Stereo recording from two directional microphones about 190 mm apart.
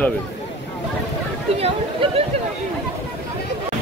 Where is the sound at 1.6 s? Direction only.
30° right (ahead or behind).